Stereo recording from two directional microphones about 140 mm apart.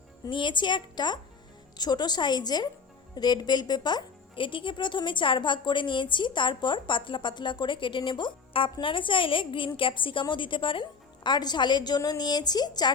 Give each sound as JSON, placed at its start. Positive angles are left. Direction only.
{"t": 0.3, "sound": "a woman's voice", "side_deg": 35}